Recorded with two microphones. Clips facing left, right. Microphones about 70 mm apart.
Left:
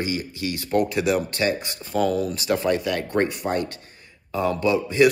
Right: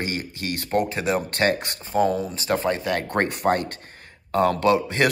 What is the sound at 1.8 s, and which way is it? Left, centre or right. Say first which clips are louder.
A man's voice: right 1 dB; right.